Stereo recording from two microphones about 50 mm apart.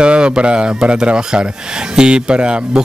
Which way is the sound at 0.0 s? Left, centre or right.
Centre.